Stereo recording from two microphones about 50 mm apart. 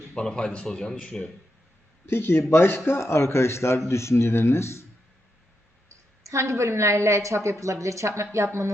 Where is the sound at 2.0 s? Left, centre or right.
Left.